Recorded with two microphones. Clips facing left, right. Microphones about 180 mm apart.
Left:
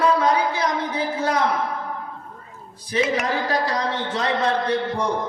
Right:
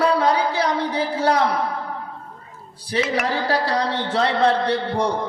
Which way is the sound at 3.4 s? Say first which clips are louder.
Right 2 dB; 35° right (ahead or behind).